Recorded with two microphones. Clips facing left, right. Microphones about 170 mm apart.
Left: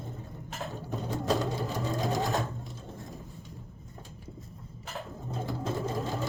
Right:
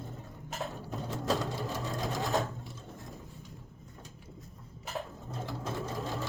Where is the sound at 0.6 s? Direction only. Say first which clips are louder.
Left 2 dB; centre (ahead or behind).